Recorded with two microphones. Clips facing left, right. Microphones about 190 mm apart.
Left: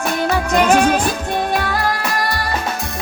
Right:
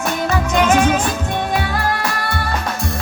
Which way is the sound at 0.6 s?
35° left (ahead or behind).